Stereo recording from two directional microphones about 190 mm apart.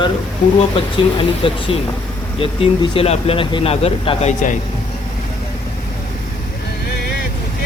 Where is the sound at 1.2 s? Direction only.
30° left (ahead or behind).